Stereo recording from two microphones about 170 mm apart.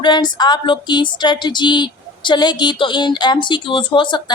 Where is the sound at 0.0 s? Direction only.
25° left (ahead or behind).